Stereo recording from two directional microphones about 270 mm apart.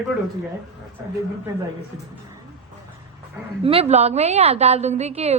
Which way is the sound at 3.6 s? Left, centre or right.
Right.